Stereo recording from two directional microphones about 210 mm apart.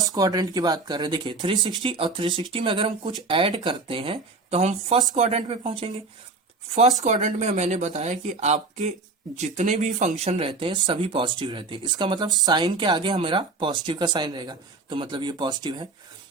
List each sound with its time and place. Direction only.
0.1 s speech: 15° right (ahead or behind)